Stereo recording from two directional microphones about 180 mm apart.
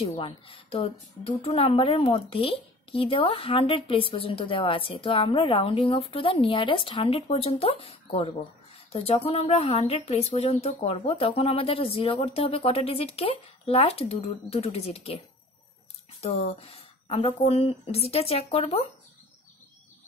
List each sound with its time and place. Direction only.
0.2 s speech: 30° left (ahead or behind)
16.2 s speech: 35° left (ahead or behind)